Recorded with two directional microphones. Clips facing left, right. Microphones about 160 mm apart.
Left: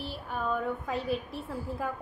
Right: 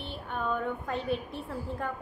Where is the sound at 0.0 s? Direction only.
5° left (ahead or behind).